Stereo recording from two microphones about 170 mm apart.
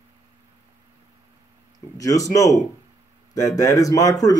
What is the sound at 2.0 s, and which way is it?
Speech, 20° left (ahead or behind).